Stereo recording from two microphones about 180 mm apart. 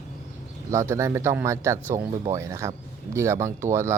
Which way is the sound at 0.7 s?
15° right (ahead or behind).